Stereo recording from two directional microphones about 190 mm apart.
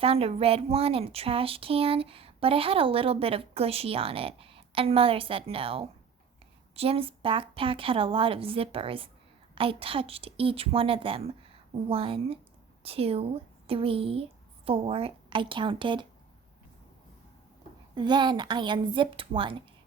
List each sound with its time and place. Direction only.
0.0 s a woman's voice: 30° right (ahead or behind)
17.9 s speech: 25° right (ahead or behind)